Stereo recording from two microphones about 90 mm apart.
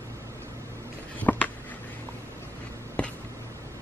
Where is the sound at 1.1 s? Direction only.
15° left (ahead or behind).